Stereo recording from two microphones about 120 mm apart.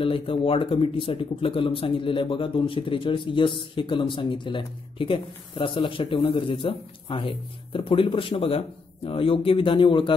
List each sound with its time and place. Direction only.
0.0 s speech: 50° left (ahead or behind)